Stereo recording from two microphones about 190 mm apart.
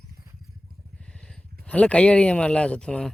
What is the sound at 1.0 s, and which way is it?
Vehicle, 5° left (ahead or behind).